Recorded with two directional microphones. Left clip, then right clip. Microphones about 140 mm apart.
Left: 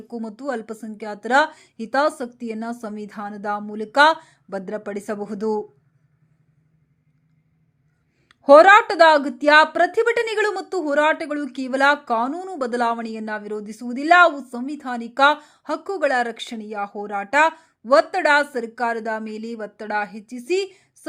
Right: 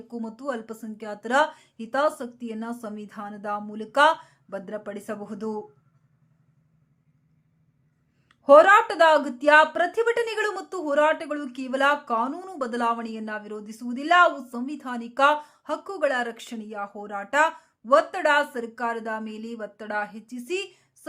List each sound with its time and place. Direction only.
0.1 s speech: 20° left (ahead or behind)
8.3 s speech: 25° left (ahead or behind)